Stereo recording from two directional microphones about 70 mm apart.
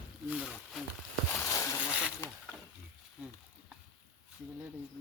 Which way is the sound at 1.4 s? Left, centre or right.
Left.